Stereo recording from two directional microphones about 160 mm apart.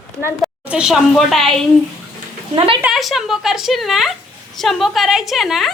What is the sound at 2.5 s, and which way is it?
Speech, 35° right (ahead or behind).